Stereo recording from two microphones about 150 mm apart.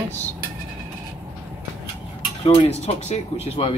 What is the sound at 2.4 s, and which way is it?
Speech, 40° left (ahead or behind).